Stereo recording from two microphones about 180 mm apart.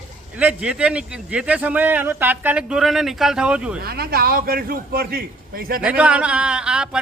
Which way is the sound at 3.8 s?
60° right (ahead or behind).